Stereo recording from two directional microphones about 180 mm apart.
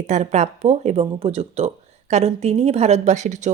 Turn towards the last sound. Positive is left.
turn(degrees=-40)  # may be behind; listen again after turning